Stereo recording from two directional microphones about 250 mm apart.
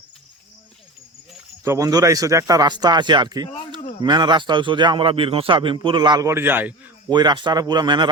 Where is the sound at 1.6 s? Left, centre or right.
Centre.